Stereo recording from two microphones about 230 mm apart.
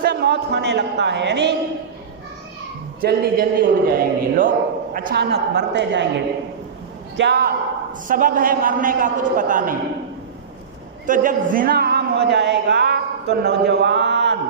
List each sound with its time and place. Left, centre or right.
0.0 s speech: right
3.0 s a man's voice: right
7.2 s a woman's voice: right
11.0 s a man's voice: right